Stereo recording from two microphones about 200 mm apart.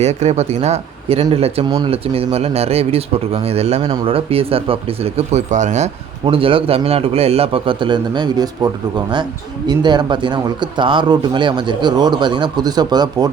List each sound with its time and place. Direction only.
0.0 s speech: 35° right (ahead or behind)